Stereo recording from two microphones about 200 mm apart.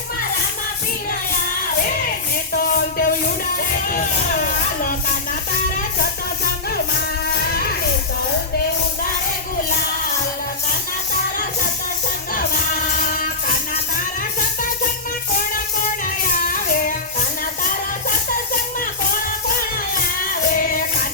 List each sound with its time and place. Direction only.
2.5 s music: 45° left (ahead or behind)
3.8 s speech: 40° left (ahead or behind)
7.3 s a sound: 50° left (ahead or behind)
12.3 s music: 45° left (ahead or behind)
20.5 s music: 45° left (ahead or behind)